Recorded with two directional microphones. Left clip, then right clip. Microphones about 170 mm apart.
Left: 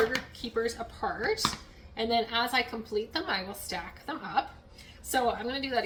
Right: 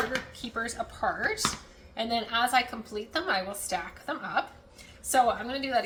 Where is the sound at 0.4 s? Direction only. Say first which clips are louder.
Left 1 dB; 15° right (ahead or behind).